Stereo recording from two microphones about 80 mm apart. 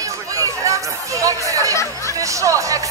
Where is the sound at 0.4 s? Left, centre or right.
Right.